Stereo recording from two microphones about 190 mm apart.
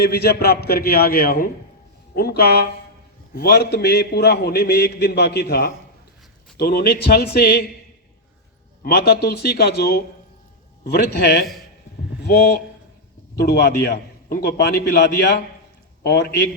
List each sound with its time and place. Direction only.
0.0 s a man's voice: 55° left (ahead or behind)
8.8 s a man's voice: 55° left (ahead or behind)